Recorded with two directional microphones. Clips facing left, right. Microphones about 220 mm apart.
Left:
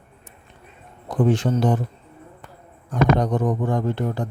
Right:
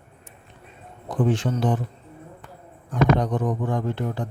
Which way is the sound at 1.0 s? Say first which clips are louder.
Left 3 dB; 40° left (ahead or behind).